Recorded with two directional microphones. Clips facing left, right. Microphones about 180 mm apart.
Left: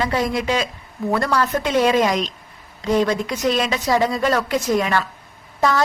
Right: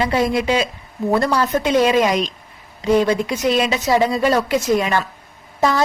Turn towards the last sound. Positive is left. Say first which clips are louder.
# right 1 dB
turn(degrees=-20)  # may be behind; listen again after turning